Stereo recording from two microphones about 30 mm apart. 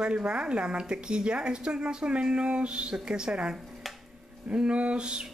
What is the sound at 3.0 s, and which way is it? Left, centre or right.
Speech, right.